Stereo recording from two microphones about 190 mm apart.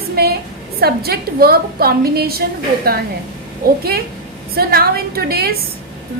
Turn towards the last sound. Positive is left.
turn(degrees=-55)  # may be behind; listen again after turning